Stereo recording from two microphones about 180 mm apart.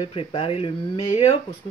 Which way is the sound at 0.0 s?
30° left (ahead or behind).